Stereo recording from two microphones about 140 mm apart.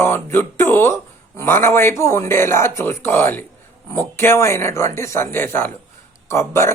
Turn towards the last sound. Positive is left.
turn(degrees=20)  # may be behind; listen again after turning